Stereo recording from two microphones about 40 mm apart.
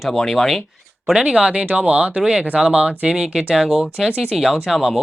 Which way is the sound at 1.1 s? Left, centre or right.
Centre.